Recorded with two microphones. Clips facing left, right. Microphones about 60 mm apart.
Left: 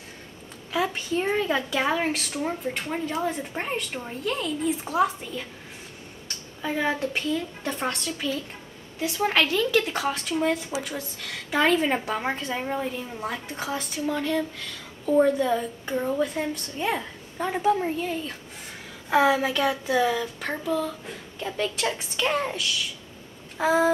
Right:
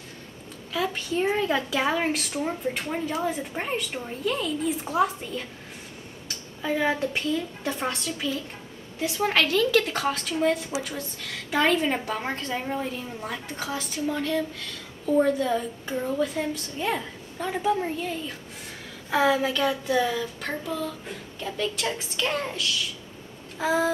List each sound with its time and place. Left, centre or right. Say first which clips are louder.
0.7 s a woman's voice: left 1 dB; centre
21.4 s a child's voice: left 2 dB; centre